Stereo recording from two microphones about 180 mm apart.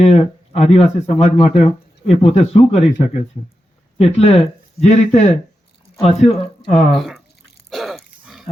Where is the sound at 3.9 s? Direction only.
35° left (ahead or behind).